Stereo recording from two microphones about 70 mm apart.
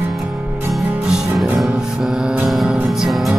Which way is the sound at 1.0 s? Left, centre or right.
Centre.